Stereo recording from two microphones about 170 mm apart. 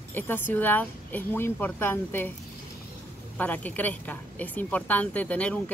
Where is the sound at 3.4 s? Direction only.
10° left (ahead or behind).